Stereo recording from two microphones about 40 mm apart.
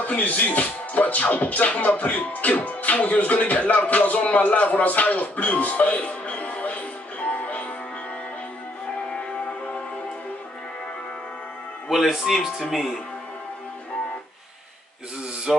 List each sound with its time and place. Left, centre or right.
0.0 s speech: left
4.3 s music: left
11.9 s speech: centre